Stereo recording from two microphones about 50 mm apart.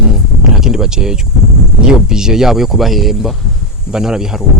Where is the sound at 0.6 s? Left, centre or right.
Centre.